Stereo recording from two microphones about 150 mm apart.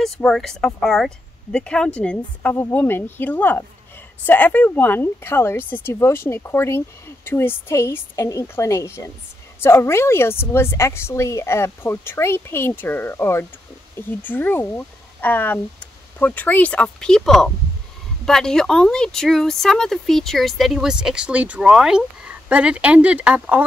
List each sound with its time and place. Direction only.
0.0 s a woman's voice: 5° left (ahead or behind)